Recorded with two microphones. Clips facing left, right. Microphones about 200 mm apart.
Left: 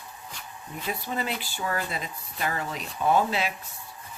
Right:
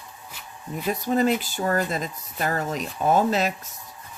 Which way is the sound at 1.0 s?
45° right (ahead or behind).